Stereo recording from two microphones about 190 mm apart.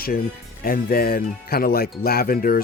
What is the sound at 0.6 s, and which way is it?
Speech, 50° left (ahead or behind).